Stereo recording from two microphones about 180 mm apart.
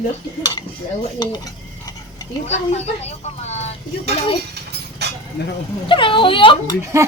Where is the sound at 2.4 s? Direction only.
40° left (ahead or behind).